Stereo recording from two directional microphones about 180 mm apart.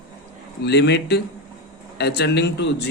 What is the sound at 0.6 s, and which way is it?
Speech, 70° left (ahead or behind).